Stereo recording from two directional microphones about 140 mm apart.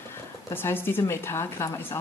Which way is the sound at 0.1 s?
15° left (ahead or behind).